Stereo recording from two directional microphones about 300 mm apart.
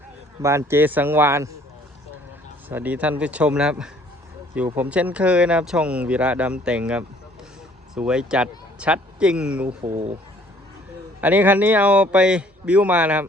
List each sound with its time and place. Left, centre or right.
0.4 s speech: centre
2.6 s speech: centre
9.8 s speech: right
11.2 s speech: centre